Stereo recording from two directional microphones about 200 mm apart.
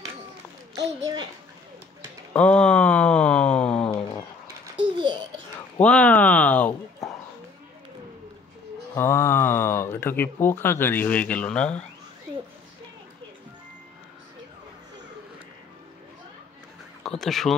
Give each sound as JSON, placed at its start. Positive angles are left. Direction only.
{"t": 0.7, "sound": "a child's voice", "side_deg": -25}
{"t": 2.3, "sound": "speech", "side_deg": 5}
{"t": 5.8, "sound": "a sound", "side_deg": 5}
{"t": 8.9, "sound": "speech", "side_deg": 10}
{"t": 17.0, "sound": "speech", "side_deg": 0}